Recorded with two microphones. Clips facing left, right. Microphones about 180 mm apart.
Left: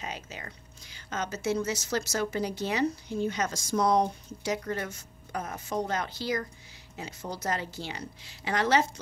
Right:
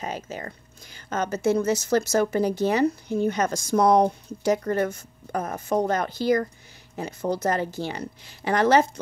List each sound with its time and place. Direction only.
0.0 s speech: 45° right (ahead or behind)